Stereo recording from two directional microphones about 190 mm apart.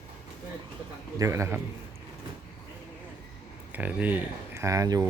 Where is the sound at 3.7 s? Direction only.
10° right (ahead or behind).